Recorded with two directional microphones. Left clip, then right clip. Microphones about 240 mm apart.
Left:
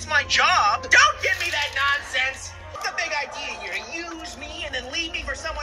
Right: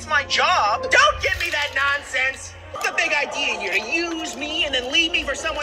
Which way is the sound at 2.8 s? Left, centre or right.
Right.